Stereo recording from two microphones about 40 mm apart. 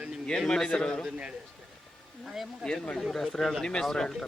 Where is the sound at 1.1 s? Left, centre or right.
Right.